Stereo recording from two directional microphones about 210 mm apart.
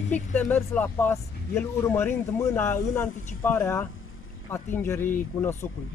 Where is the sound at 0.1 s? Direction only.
10° left (ahead or behind).